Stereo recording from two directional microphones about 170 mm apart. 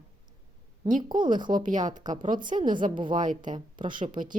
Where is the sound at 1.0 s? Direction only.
25° right (ahead or behind).